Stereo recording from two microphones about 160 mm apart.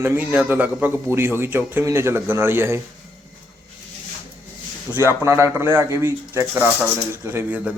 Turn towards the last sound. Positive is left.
turn(degrees=-10)  # may be behind; listen again after turning